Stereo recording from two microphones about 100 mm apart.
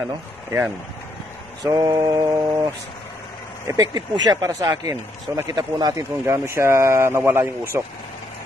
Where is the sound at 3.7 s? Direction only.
40° right (ahead or behind).